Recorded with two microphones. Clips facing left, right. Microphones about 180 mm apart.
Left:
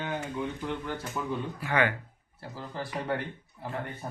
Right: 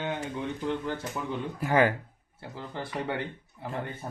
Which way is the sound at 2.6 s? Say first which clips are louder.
Right 1 dB; 25° right (ahead or behind).